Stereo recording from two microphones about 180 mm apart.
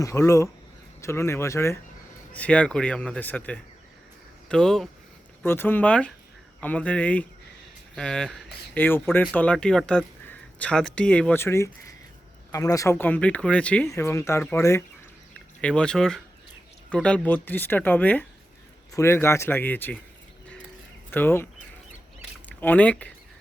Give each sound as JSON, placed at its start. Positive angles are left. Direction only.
{"t": 0.0, "sound": "speech", "side_deg": 15}
{"t": 15.6, "sound": "speech", "side_deg": 5}
{"t": 21.1, "sound": "speech", "side_deg": 10}
{"t": 22.4, "sound": "speech", "side_deg": 10}